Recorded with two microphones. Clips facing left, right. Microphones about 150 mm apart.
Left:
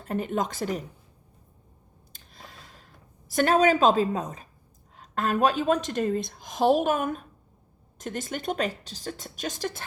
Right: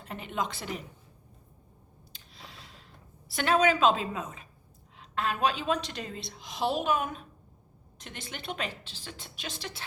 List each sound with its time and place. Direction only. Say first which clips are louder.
0.0 s a woman's voice: left 6 dB; 45° left (ahead or behind)
2.1 s a sound: left 2 dB; 45° left (ahead or behind)
4.9 s a woman's voice: left 5 dB; 45° left (ahead or behind)